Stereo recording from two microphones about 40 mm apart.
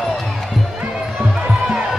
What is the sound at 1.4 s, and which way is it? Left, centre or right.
Music, centre.